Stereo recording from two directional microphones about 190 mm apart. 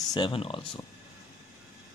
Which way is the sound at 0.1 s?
25° left (ahead or behind).